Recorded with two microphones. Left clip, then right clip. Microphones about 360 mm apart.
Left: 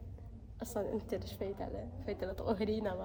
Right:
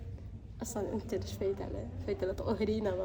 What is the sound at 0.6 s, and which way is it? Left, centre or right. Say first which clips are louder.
A woman's voice: right 1 dB; centre.